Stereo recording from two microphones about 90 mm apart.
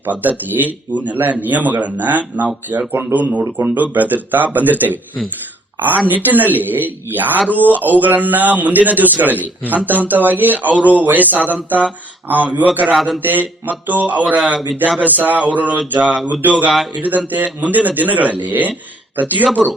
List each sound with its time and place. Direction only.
0.0 s a man's voice: 20° right (ahead or behind)
6.1 s a man's voice: 20° right (ahead or behind)
12.9 s a man's voice: centre (ahead or behind)
13.1 s a man's voice: 20° right (ahead or behind)